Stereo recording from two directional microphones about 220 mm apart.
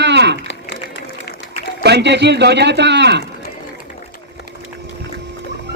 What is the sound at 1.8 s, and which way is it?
Speech, 50° right (ahead or behind).